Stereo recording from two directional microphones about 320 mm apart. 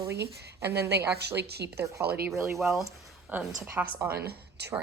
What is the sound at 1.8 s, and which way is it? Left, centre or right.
Speech, centre.